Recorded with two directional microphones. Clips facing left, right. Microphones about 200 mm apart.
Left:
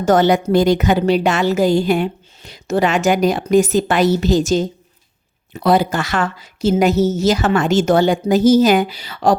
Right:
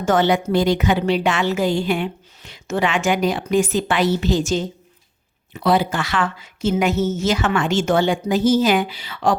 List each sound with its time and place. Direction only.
0.0 s a woman's voice: 40° left (ahead or behind)